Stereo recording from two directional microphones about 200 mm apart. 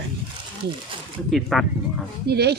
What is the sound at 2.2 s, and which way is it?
Speech, 55° right (ahead or behind).